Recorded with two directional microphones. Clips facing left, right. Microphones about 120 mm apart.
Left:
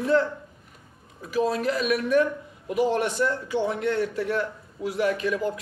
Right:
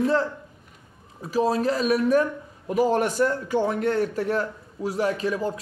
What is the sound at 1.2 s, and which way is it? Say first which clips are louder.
Speech: right 2 dB; 35° right (ahead or behind).